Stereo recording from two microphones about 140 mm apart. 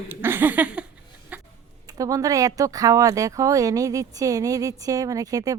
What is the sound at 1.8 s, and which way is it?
Speech, 25° right (ahead or behind).